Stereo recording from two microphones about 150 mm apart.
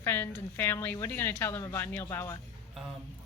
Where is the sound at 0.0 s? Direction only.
15° left (ahead or behind).